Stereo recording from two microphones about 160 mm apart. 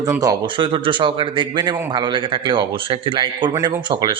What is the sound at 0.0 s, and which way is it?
A man's voice, 20° right (ahead or behind).